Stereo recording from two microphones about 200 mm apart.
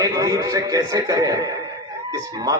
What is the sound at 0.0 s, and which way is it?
A man's voice, 15° right (ahead or behind).